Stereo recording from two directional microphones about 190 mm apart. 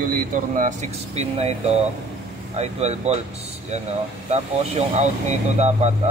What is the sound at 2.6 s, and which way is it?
Speech, 35° right (ahead or behind).